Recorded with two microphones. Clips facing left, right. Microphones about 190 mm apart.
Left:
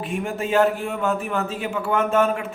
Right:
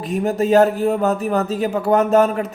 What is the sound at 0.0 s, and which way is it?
A man's voice, 40° right (ahead or behind).